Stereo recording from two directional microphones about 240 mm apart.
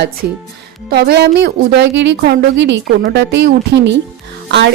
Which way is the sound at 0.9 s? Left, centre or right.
Right.